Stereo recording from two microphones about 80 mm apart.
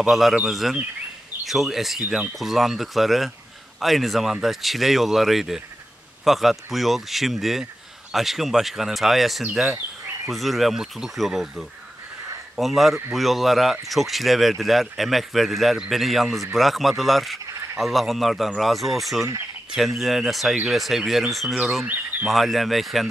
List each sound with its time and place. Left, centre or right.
0.0 s speech: centre
21.8 s speech: right
22.2 s speech: centre